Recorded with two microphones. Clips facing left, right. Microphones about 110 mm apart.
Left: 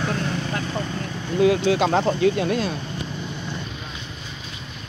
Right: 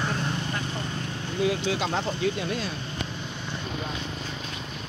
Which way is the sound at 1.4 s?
60° left (ahead or behind).